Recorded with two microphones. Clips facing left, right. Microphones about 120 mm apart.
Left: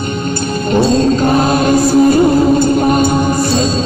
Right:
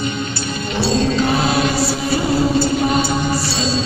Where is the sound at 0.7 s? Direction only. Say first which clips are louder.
Left 7 dB; 45° left (ahead or behind).